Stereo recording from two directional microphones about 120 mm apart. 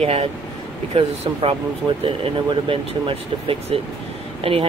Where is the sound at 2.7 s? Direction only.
50° right (ahead or behind).